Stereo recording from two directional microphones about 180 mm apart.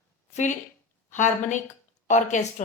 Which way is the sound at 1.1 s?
40° left (ahead or behind).